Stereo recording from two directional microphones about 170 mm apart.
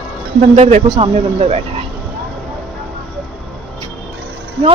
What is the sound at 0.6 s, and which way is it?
Speech, 40° right (ahead or behind).